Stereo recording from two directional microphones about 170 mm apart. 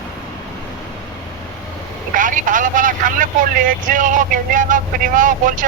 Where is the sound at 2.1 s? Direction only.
50° right (ahead or behind).